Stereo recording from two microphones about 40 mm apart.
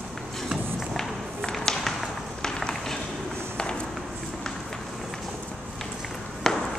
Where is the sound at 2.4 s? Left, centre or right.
Centre.